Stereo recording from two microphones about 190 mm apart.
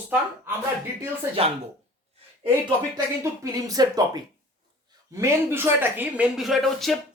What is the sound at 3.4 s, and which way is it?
Speech, 20° right (ahead or behind).